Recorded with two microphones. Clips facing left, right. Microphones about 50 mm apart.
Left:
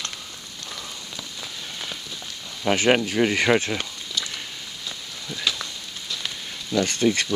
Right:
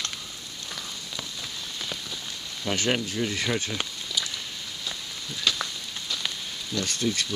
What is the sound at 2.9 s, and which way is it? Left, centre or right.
Speech, left.